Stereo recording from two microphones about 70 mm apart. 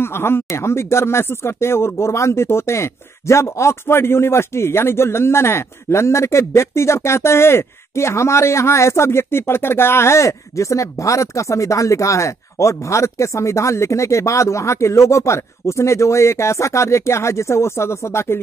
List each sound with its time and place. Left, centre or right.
0.0 s speech: left